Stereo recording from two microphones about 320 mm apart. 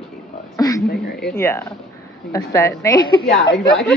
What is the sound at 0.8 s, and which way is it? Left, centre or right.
Speech, left.